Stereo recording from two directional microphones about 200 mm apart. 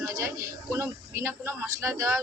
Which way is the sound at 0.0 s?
15° right (ahead or behind).